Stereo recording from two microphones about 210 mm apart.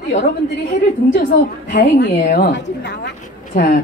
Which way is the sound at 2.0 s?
50° left (ahead or behind).